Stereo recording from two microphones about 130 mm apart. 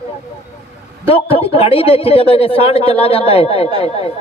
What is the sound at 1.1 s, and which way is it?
A man's voice, 45° left (ahead or behind).